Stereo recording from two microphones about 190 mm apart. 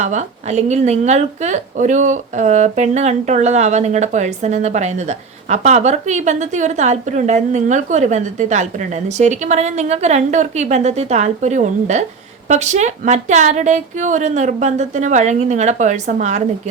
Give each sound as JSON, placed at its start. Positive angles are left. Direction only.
{"t": 0.0, "sound": "speech", "side_deg": -40}